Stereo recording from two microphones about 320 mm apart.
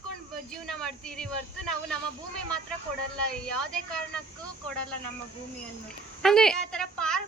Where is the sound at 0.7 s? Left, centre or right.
Centre.